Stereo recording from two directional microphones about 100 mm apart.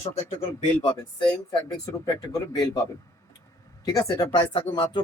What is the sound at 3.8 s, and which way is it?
Speech, 40° left (ahead or behind).